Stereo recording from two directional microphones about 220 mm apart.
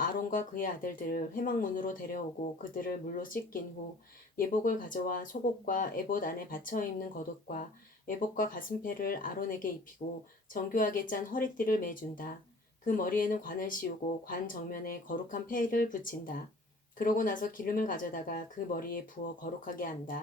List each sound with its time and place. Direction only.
0.0 s speech: 40° left (ahead or behind)